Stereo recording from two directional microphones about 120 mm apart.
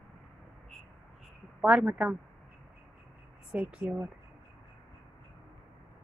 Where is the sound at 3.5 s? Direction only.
15° right (ahead or behind).